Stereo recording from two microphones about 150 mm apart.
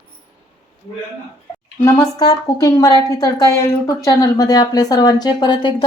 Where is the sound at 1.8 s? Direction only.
25° left (ahead or behind).